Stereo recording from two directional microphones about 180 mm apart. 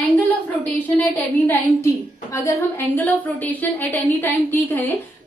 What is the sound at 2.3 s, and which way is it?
A woman's voice, 15° left (ahead or behind).